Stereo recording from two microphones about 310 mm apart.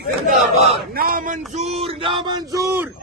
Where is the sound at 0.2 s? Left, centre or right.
Centre.